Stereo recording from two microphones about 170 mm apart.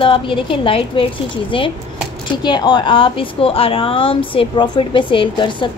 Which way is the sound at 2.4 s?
25° left (ahead or behind).